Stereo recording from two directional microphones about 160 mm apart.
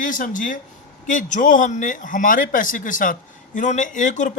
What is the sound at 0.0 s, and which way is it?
Speech, 55° left (ahead or behind).